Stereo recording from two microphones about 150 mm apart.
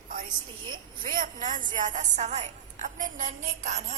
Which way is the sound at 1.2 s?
60° right (ahead or behind).